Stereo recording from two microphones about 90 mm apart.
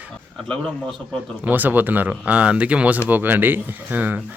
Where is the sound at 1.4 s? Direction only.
20° right (ahead or behind).